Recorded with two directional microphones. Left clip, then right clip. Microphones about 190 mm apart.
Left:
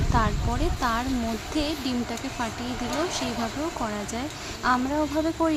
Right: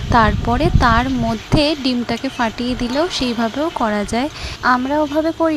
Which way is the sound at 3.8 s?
35° right (ahead or behind).